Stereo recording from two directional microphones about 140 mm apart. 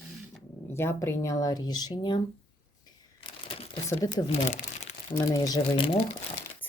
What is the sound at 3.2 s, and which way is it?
Crumpling, 40° left (ahead or behind).